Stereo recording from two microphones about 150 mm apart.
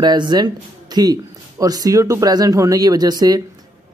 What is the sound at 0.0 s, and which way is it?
Speech, 30° right (ahead or behind).